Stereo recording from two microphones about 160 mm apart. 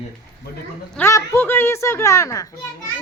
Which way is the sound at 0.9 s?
15° left (ahead or behind).